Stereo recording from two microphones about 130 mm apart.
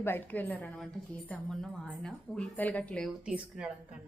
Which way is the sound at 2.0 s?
10° left (ahead or behind).